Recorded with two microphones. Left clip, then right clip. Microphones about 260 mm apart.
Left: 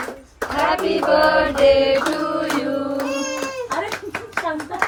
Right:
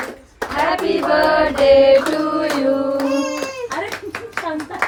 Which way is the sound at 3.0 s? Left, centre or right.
Centre.